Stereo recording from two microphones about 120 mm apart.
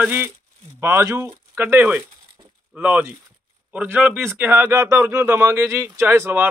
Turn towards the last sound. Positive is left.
turn(degrees=-20)  # may be behind; listen again after turning